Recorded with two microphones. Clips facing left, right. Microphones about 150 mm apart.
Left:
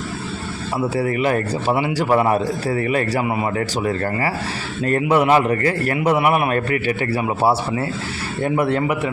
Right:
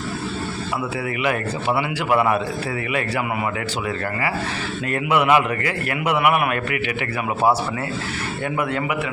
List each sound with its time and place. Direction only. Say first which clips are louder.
0.9 s a man's voice: left 5 dB; 40° left (ahead or behind)
4.9 s a man's voice: left 3 dB; 40° left (ahead or behind)
8.4 s a man's voice: left 5 dB; 35° left (ahead or behind)